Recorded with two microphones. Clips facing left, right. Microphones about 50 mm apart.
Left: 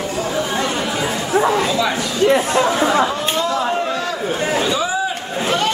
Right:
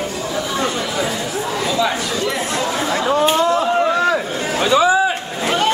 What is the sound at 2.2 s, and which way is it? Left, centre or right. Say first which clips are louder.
Chatter: left 11 dB; left.